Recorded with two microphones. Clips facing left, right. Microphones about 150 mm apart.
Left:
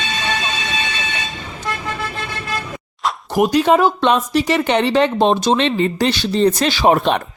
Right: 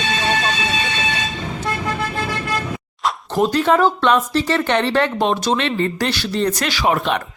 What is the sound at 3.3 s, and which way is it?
Speech, 15° left (ahead or behind).